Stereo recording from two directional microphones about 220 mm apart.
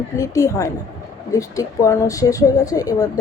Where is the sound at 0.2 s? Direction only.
15° left (ahead or behind).